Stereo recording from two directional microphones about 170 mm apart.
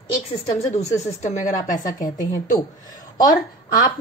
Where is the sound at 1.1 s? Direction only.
40° left (ahead or behind).